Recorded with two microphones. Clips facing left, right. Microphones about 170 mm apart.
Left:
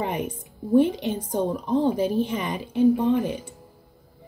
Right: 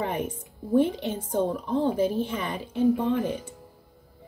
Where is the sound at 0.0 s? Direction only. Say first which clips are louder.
Left 1 dB; 15° left (ahead or behind).